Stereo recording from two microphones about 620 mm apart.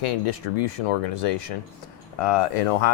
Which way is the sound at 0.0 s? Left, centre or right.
Left.